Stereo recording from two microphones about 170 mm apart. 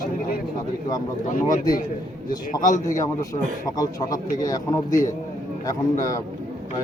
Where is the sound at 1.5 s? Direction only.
55° left (ahead or behind).